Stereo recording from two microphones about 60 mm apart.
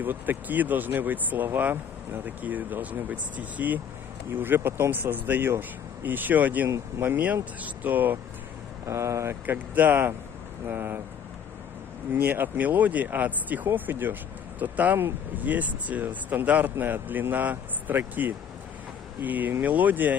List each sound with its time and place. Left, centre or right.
0.0 s speech: right
8.8 s speech: right
9.5 s speech: right
12.1 s speech: right